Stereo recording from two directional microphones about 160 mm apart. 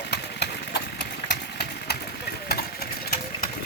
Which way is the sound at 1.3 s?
90° left.